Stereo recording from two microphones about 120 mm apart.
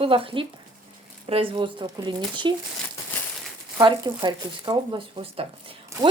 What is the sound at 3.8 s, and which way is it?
A woman's voice, 40° right (ahead or behind).